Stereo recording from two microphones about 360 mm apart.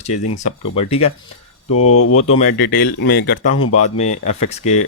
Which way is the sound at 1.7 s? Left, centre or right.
Left.